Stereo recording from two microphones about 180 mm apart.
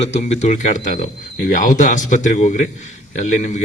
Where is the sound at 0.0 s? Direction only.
40° left (ahead or behind).